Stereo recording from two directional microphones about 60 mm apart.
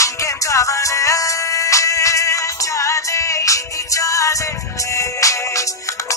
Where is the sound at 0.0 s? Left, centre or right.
Left.